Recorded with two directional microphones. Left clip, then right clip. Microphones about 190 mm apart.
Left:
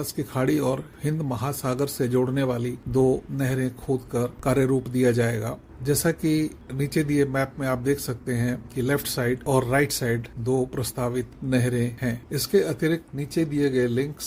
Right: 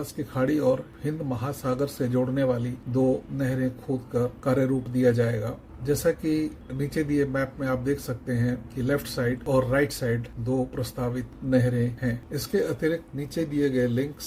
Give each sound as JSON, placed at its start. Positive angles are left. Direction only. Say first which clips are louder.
{"t": 0.3, "sound": "a man's voice", "louder": "right 1 dB", "side_deg": 45}